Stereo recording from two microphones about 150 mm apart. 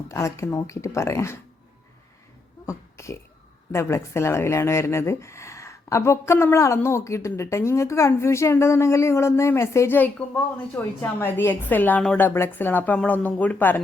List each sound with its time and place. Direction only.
0.1 s speech: 20° left (ahead or behind)
2.6 s burping: 20° left (ahead or behind)
3.7 s speech: 15° left (ahead or behind)